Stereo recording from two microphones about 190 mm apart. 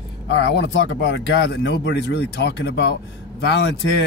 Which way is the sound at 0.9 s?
70° left (ahead or behind).